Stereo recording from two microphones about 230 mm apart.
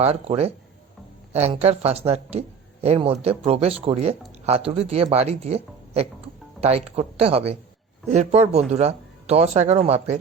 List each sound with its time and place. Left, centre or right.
0.0 s speech: right